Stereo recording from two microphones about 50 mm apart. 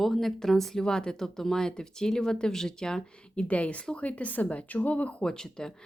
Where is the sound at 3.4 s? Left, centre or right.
Left.